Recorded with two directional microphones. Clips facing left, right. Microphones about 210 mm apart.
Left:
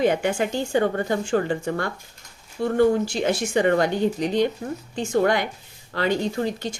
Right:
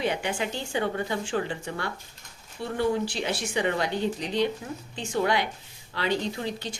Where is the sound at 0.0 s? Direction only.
45° left (ahead or behind).